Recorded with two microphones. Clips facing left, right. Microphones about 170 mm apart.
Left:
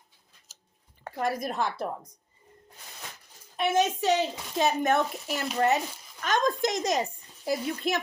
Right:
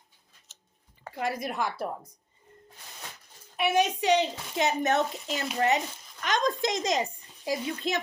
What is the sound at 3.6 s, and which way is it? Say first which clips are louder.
Speech: even; 15° right (ahead or behind).